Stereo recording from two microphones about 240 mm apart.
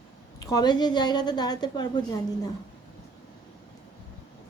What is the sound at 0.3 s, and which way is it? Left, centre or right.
A woman's voice, centre.